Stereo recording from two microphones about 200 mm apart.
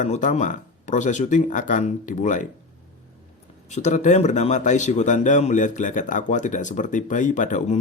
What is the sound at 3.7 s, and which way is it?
Speech, 35° left (ahead or behind).